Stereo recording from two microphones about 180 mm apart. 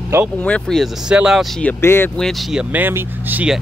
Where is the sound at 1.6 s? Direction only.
15° left (ahead or behind).